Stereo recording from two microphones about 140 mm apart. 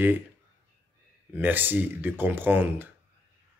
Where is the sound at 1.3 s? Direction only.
15° right (ahead or behind).